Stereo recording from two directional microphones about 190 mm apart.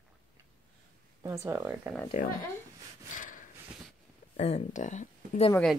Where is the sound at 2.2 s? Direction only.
45° left (ahead or behind).